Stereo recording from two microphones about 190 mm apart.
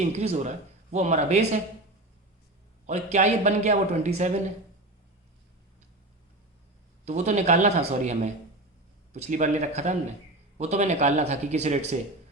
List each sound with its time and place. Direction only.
0.1 s speech: 35° right (ahead or behind)
2.8 s speech: 40° right (ahead or behind)
7.0 s speech: 35° right (ahead or behind)